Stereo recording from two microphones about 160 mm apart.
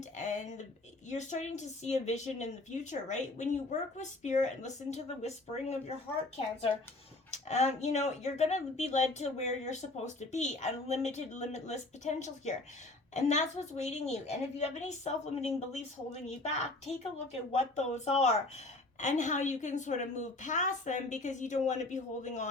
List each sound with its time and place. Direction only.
0.2 s a sound: 50° left (ahead or behind)
1.1 s speech: 45° left (ahead or behind)
7.3 s speech: 45° left (ahead or behind)